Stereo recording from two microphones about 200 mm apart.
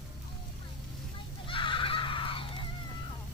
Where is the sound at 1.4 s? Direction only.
25° left (ahead or behind).